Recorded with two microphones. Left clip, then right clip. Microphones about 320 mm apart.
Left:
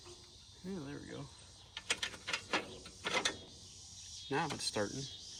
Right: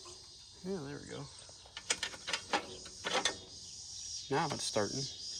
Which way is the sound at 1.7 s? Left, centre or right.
Right.